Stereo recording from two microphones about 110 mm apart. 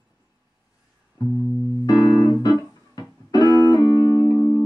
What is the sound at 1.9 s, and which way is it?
Music, 40° left (ahead or behind).